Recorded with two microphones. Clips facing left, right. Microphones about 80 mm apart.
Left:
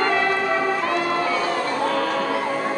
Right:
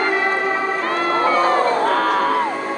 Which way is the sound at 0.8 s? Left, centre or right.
Right.